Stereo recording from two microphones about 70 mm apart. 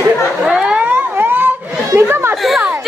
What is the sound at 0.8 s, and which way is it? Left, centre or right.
Siren, right.